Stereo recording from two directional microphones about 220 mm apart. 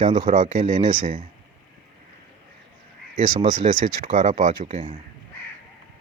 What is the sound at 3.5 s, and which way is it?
Speech, 40° right (ahead or behind).